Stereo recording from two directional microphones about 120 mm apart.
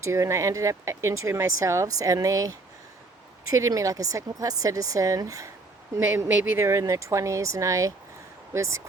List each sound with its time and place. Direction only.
0.0 s speech: 25° right (ahead or behind)